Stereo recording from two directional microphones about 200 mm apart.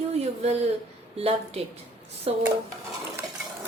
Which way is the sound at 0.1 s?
30° right (ahead or behind).